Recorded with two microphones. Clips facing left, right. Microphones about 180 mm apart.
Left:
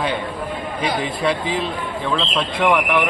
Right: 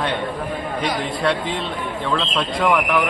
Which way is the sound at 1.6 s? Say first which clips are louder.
Left 1 dB; 5° left (ahead or behind).